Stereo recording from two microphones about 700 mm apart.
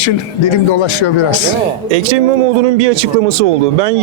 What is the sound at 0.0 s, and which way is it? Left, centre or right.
A man's voice, left.